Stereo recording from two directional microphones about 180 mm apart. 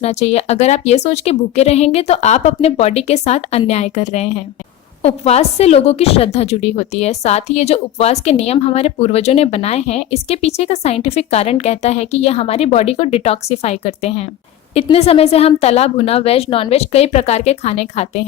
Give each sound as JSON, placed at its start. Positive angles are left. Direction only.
{"t": 0.0, "sound": "a woman's voice", "side_deg": 35}